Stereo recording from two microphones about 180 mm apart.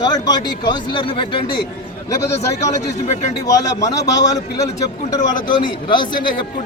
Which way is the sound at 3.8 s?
20° left (ahead or behind).